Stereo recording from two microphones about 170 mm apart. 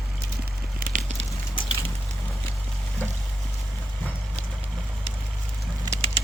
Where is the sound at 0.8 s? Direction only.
45° right (ahead or behind).